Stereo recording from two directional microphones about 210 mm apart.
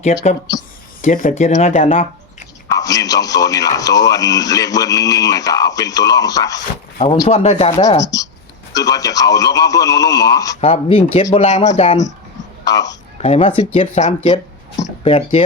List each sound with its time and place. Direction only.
0.1 s speech: 35° left (ahead or behind)
2.6 s a man's voice: 15° left (ahead or behind)
10.6 s speech: 30° left (ahead or behind)
12.6 s a child's voice: 15° left (ahead or behind)
13.1 s speech: 30° left (ahead or behind)